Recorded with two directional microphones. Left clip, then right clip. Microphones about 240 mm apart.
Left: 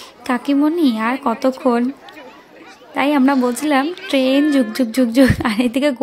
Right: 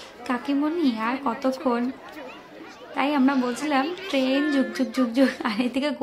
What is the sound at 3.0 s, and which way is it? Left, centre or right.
A woman's voice, left.